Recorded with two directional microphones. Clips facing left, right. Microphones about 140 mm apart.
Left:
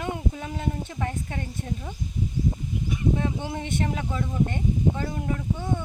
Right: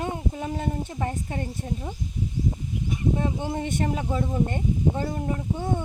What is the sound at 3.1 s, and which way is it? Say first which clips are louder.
A woman's voice: right 2 dB; 30° right (ahead or behind).